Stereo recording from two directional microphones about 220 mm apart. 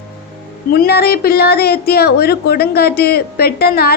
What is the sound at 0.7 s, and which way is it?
A woman's voice, 45° left (ahead or behind).